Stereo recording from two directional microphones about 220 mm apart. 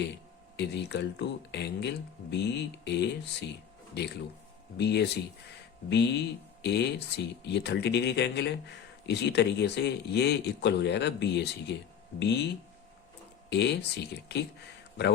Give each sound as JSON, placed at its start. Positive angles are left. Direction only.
{"t": 0.5, "sound": "speech", "side_deg": 50}
{"t": 13.5, "sound": "speech", "side_deg": 50}